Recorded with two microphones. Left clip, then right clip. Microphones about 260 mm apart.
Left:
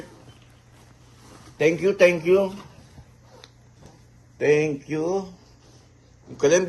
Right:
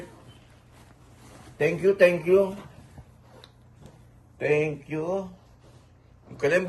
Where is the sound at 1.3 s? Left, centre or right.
Centre.